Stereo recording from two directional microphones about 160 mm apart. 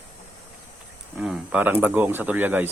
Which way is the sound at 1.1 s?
5° right (ahead or behind).